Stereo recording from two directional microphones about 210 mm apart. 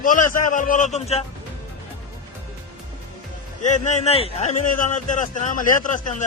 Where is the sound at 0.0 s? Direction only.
40° left (ahead or behind).